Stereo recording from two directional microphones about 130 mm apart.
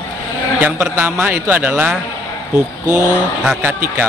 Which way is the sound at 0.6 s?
15° right (ahead or behind).